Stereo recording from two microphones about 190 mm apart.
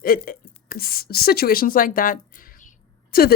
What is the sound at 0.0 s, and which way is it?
Speech, 50° left (ahead or behind).